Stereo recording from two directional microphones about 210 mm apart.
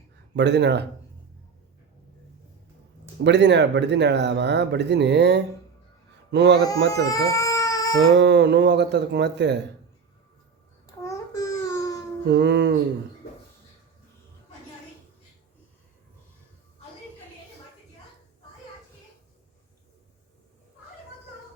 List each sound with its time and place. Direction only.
0.3 s speech: 55° right (ahead or behind)
3.2 s speech: 55° right (ahead or behind)
6.9 s speech: 15° left (ahead or behind)
8.1 s speech: 55° right (ahead or behind)
10.8 s babbling: 15° left (ahead or behind)
12.3 s speech: 55° right (ahead or behind)